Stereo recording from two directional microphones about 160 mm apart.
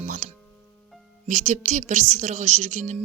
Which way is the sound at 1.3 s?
50° right (ahead or behind).